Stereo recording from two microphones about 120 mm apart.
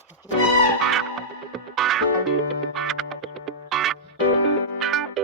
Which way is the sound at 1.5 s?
Centre (ahead or behind).